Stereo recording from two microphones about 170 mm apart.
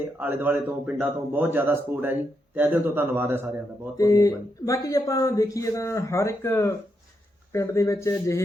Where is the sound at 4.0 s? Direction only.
20° left (ahead or behind).